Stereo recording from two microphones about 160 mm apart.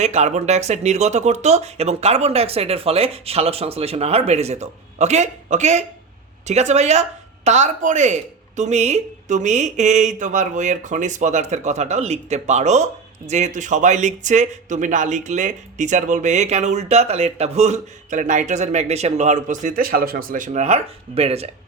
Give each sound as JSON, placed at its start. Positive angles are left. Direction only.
{"t": 0.0, "sound": "speech", "side_deg": -45}